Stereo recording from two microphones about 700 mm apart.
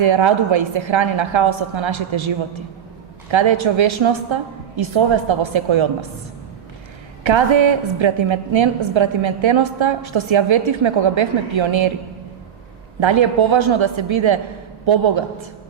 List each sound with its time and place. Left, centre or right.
0.0 s a woman's voice: right
3.3 s a woman's voice: right
7.3 s a woman's voice: right
13.0 s a woman's voice: right